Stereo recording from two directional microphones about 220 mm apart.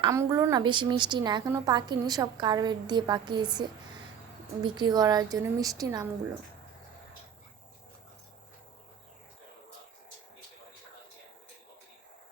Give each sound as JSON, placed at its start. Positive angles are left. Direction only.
{"t": 0.0, "sound": "a woman's voice", "side_deg": -15}